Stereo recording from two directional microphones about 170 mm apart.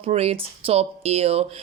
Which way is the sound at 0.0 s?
40° right (ahead or behind).